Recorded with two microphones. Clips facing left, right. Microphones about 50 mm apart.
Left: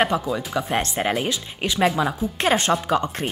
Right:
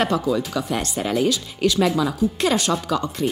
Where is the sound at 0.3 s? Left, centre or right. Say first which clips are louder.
Right 2 dB; centre.